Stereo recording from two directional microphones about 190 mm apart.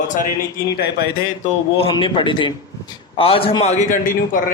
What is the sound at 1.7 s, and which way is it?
A man's voice, 30° left (ahead or behind).